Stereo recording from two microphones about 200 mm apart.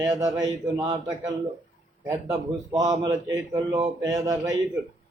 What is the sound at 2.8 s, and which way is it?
A man's voice, 20° right (ahead or behind).